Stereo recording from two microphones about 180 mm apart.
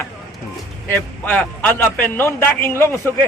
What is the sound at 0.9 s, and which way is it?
A man's voice, 10° left (ahead or behind).